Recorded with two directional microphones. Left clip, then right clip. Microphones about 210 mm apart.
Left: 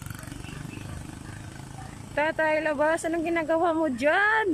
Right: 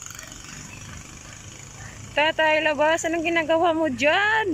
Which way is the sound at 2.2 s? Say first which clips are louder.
Right 5 dB; centre (ahead or behind).